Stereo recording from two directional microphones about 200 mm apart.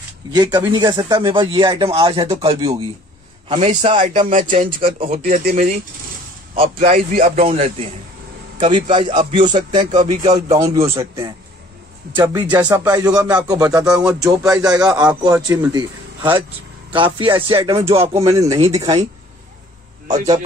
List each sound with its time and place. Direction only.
0.3 s speech: 20° right (ahead or behind)
4.3 s speech: 40° right (ahead or behind)
4.6 s speech: 25° right (ahead or behind)
5.2 s speech: 45° right (ahead or behind)
6.5 s speech: 25° right (ahead or behind)
6.9 s speech: 40° right (ahead or behind); by 11.1 s 15° right (ahead or behind)
12.2 s speech: 20° right (ahead or behind)
18.2 s speech: 15° right (ahead or behind)